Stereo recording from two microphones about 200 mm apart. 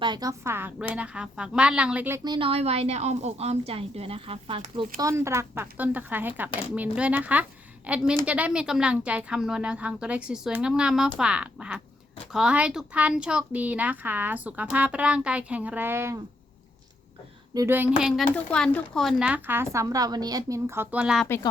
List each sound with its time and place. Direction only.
0.0 s a woman's voice: 20° right (ahead or behind)
4.9 s a woman's voice: 15° right (ahead or behind)
17.5 s speech: 15° right (ahead or behind)
21.2 s speech: 10° left (ahead or behind)